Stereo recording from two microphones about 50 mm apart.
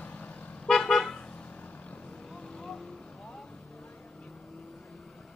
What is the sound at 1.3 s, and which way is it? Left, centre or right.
Vehicle, left.